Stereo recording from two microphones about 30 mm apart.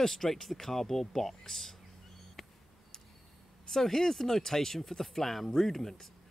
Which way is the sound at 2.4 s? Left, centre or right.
Centre.